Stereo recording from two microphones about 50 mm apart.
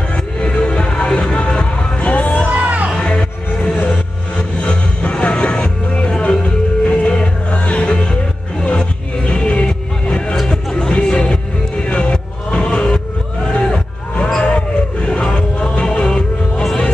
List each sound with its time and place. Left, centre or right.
0.4 s music: centre
2.5 s music: right
3.0 s music: left
11.9 s a sound: centre
14.4 s music: left